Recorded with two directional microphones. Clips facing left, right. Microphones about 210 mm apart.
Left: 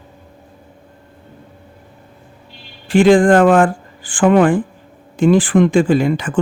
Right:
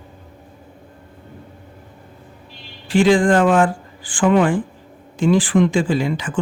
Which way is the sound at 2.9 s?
55° left (ahead or behind).